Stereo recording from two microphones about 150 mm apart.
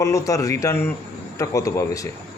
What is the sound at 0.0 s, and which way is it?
A man's voice, 20° left (ahead or behind).